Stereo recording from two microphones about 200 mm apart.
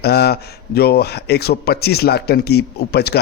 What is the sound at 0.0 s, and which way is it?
Speech, 55° left (ahead or behind).